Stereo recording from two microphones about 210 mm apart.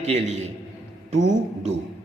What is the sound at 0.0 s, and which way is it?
Speech, 30° right (ahead or behind).